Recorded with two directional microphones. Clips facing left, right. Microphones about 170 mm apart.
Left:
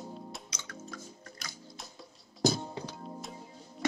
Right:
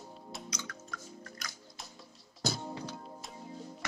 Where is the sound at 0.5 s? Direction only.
25° left (ahead or behind).